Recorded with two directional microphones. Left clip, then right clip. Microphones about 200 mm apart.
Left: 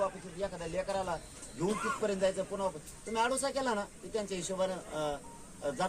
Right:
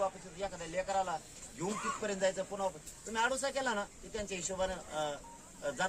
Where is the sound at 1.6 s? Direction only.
10° left (ahead or behind).